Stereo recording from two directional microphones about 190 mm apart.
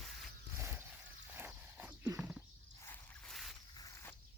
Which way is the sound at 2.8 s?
5° left (ahead or behind).